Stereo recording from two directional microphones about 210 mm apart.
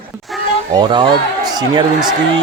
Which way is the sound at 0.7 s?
20° right (ahead or behind).